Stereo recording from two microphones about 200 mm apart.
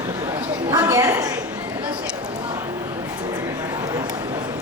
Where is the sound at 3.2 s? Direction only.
10° right (ahead or behind).